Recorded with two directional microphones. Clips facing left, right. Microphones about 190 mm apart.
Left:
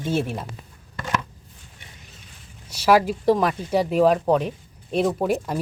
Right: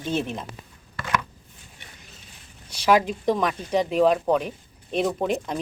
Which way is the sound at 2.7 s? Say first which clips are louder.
Left 2 dB; 5° left (ahead or behind).